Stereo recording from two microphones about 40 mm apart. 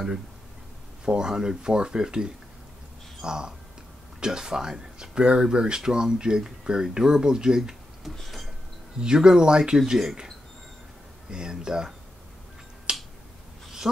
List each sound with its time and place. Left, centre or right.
1.0 s speech: centre
8.0 s a sound: centre
9.0 s speech: centre
11.2 s speech: centre
12.9 s finger snapping: right